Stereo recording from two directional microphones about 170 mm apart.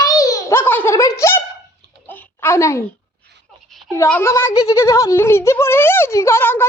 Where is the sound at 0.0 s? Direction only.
20° left (ahead or behind).